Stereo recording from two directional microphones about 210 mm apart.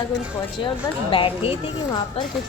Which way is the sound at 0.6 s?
25° left (ahead or behind).